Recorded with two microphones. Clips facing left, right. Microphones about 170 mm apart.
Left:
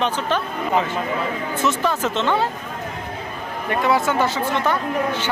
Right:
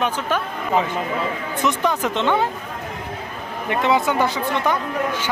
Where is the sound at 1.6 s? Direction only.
15° right (ahead or behind).